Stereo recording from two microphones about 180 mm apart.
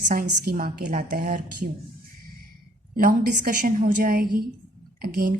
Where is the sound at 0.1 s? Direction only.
55° right (ahead or behind).